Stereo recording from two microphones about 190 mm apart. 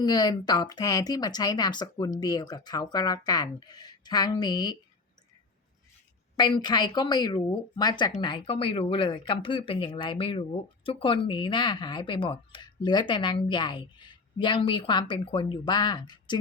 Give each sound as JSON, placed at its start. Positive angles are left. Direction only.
{"t": 0.0, "sound": "speech", "side_deg": 20}
{"t": 6.3, "sound": "speech", "side_deg": 25}